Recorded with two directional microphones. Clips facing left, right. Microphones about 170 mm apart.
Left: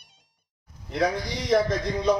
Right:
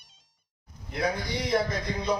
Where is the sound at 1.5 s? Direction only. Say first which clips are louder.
Left 5 dB; 90° left.